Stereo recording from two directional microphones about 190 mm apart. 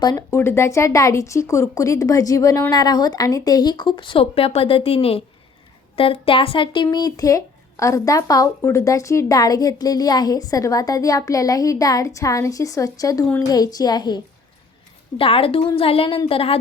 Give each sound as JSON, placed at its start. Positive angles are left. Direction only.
{"t": 0.0, "sound": "a woman's voice", "side_deg": 20}
{"t": 13.5, "sound": "a woman's voice", "side_deg": 20}
{"t": 15.2, "sound": "a woman's voice", "side_deg": 30}